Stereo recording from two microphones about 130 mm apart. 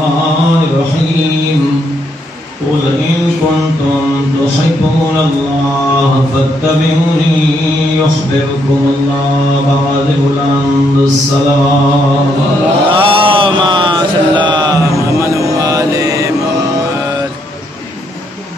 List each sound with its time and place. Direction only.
12.9 s mantra: 40° right (ahead or behind); by 16.3 s 25° right (ahead or behind)